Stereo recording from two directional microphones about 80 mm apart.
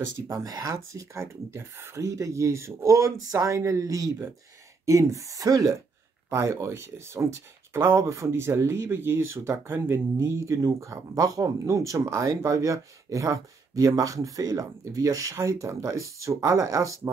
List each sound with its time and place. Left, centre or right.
0.3 s speech: right